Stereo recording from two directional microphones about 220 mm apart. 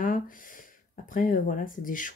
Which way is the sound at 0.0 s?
40° left (ahead or behind).